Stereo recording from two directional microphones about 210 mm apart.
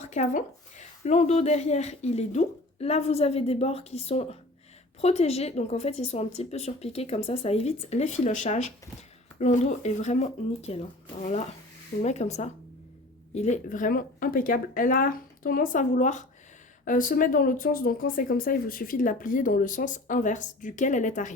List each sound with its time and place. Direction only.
0.0 s a woman's voice: 35° left (ahead or behind)